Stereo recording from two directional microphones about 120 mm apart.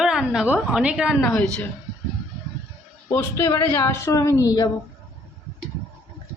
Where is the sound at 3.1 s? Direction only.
20° left (ahead or behind).